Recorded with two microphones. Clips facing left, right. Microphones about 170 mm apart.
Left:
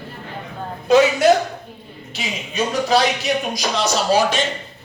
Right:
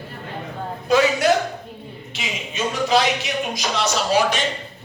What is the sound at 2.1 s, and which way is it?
Speech, 35° left (ahead or behind).